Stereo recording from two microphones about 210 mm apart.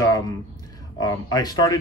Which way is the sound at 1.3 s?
20° left (ahead or behind).